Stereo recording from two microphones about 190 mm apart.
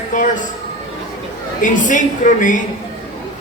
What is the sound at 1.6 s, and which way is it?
Speech, 40° left (ahead or behind).